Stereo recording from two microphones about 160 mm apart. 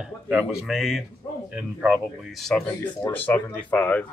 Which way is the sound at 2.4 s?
5° left (ahead or behind).